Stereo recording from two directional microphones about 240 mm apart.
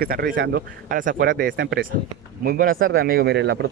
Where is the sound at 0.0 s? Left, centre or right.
Right.